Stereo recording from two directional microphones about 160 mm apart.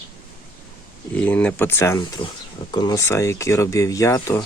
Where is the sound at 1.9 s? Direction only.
25° left (ahead or behind).